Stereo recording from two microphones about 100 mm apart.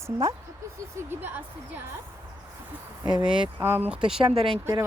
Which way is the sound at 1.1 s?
20° right (ahead or behind).